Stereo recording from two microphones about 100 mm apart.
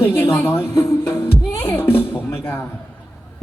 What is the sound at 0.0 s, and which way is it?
A woman's voice, 25° left (ahead or behind).